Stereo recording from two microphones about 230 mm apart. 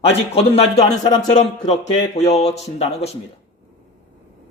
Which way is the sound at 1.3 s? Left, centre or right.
Left.